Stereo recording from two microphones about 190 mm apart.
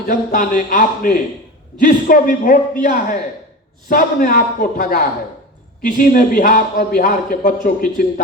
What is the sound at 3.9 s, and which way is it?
Speech, 45° left (ahead or behind).